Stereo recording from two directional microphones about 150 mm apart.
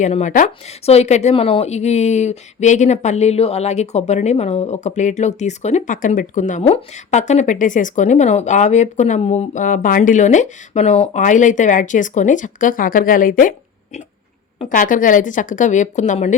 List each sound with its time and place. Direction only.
0.0 s speech: 50° left (ahead or behind)
14.6 s a woman's voice: 60° left (ahead or behind)